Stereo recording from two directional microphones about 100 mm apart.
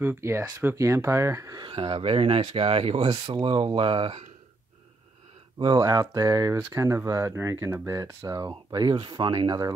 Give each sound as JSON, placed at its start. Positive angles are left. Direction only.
{"t": 0.0, "sound": "speech", "side_deg": -25}
{"t": 1.6, "sound": "speech", "side_deg": -65}
{"t": 3.1, "sound": "speech", "side_deg": -50}
{"t": 5.6, "sound": "speech", "side_deg": -45}